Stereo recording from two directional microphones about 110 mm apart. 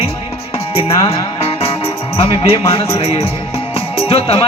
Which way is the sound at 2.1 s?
60° left (ahead or behind).